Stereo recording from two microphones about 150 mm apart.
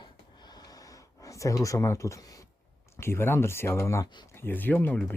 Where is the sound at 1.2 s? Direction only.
20° left (ahead or behind).